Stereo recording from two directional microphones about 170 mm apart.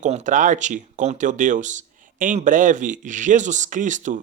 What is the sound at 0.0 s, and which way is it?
Speech, 45° right (ahead or behind).